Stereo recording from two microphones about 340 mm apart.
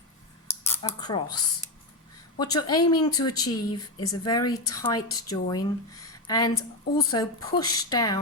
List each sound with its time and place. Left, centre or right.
0.6 s speech: centre
2.4 s speech: centre
3.5 s a woman's voice: left
4.0 s speech: centre
6.0 s a sound: centre
6.9 s speech: centre